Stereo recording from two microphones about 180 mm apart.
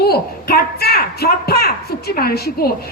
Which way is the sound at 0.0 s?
60° left (ahead or behind).